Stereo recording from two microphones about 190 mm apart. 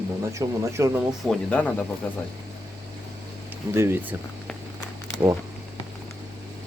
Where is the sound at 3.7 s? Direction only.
15° right (ahead or behind).